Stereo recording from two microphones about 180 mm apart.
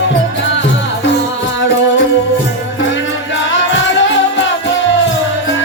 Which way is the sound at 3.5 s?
90° left.